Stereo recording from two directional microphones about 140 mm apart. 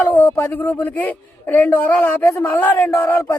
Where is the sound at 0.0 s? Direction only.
10° left (ahead or behind).